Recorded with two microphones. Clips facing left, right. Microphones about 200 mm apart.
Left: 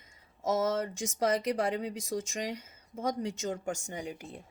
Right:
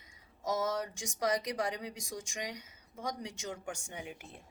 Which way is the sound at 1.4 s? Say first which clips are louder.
Left 6 dB; 60° left (ahead or behind).